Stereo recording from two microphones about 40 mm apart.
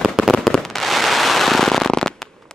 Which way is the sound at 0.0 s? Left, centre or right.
Centre.